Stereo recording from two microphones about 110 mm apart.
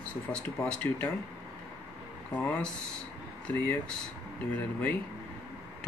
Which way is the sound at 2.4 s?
10° left (ahead or behind).